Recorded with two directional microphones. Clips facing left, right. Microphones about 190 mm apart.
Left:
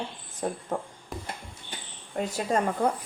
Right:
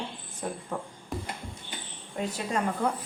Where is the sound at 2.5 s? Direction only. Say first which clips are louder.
Left 4 dB; 45° left (ahead or behind).